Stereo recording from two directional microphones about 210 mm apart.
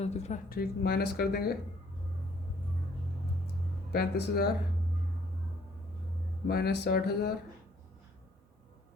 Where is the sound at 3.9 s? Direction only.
45° left (ahead or behind).